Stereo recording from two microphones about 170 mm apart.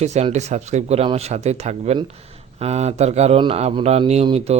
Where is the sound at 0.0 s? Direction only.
40° right (ahead or behind).